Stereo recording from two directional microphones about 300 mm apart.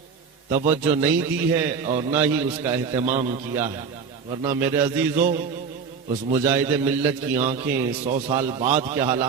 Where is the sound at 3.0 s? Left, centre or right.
Right.